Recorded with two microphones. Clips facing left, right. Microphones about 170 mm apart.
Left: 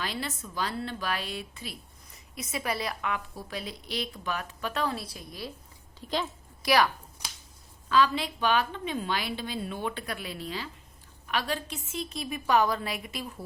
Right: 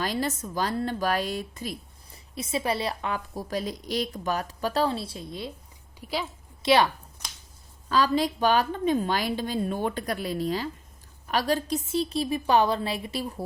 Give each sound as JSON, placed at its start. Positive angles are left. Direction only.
{"t": 0.0, "sound": "a woman's voice", "side_deg": -40}
{"t": 6.0, "sound": "a woman's voice", "side_deg": -10}
{"t": 6.6, "sound": "speech", "side_deg": -25}
{"t": 7.9, "sound": "a woman's voice", "side_deg": -40}